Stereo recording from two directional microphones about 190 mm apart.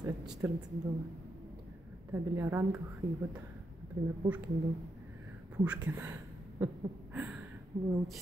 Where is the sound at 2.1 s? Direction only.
15° right (ahead or behind).